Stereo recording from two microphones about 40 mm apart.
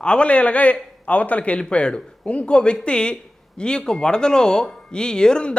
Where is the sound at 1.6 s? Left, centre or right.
Left.